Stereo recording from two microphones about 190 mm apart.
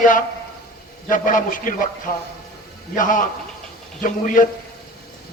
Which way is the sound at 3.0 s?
45° left (ahead or behind).